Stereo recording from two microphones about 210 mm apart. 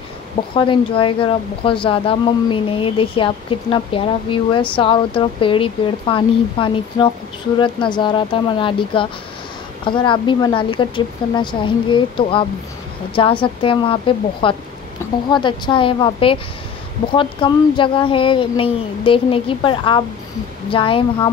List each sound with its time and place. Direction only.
0.6 s speech: 25° left (ahead or behind)